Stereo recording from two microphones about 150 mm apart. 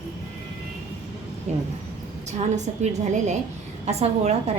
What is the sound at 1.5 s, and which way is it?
Speech, 50° right (ahead or behind).